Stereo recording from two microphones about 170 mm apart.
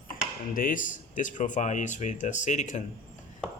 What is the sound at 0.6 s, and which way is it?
Speech, 55° left (ahead or behind).